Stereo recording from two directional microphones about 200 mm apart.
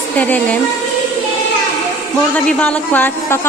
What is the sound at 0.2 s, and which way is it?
Speech, 5° left (ahead or behind).